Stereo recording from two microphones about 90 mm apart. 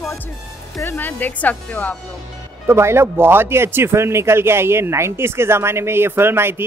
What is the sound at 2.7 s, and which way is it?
Speech, 30° right (ahead or behind).